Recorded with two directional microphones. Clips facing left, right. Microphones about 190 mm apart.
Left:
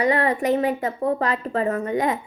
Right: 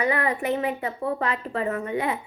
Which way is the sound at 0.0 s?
35° left (ahead or behind).